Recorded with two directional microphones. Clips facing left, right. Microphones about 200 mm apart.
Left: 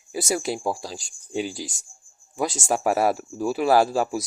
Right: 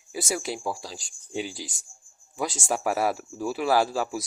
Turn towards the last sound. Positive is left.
turn(degrees=45)  # may be behind; listen again after turning